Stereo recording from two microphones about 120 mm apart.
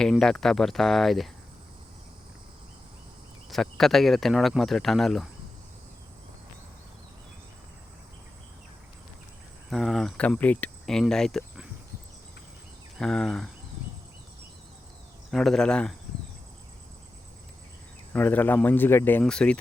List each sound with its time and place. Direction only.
0.0 s speech: 5° left (ahead or behind)
3.5 s speech: 5° left (ahead or behind)
9.6 s speech: centre (ahead or behind)
13.0 s speech: 5° left (ahead or behind)
15.3 s speech: centre (ahead or behind)
18.1 s speech: 15° left (ahead or behind)
19.2 s speech: 5° left (ahead or behind)